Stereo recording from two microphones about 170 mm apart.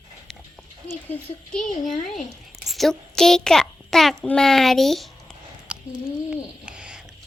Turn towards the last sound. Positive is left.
turn(degrees=-5)  # may be behind; listen again after turning